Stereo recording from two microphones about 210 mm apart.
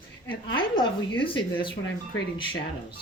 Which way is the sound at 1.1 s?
25° left (ahead or behind).